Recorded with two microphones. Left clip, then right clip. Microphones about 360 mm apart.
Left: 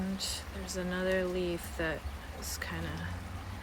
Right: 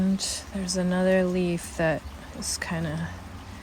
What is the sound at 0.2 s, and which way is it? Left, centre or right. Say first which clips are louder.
Speech: right 6 dB; centre.